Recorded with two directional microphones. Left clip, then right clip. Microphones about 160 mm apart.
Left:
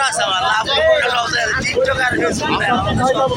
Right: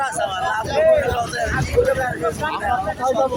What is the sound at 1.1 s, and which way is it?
Speech, 30° right (ahead or behind).